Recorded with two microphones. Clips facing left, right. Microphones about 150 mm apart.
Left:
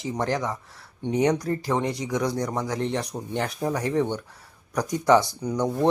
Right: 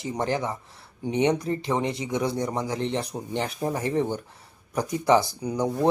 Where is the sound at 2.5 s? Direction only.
5° right (ahead or behind).